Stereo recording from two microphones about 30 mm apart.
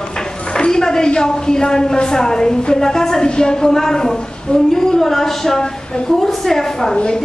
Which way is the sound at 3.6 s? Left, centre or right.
Centre.